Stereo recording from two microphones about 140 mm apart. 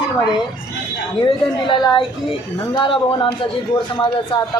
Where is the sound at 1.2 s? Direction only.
35° left (ahead or behind).